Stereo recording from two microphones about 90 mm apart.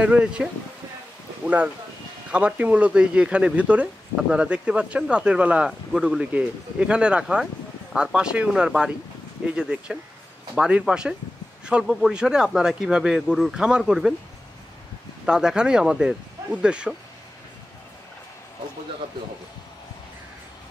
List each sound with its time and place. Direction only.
0.0 s speech: 15° right (ahead or behind)
15.2 s speech: 10° right (ahead or behind)